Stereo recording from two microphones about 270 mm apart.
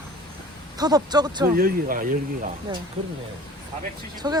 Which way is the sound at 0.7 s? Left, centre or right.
Centre.